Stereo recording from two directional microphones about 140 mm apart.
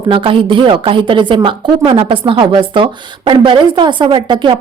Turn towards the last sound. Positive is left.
turn(degrees=-35)  # may be behind; listen again after turning